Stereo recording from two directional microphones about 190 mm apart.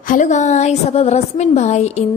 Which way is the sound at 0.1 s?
40° left (ahead or behind).